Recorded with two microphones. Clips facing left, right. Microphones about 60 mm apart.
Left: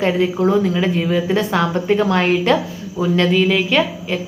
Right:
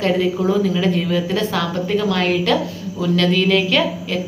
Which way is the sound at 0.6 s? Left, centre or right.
Centre.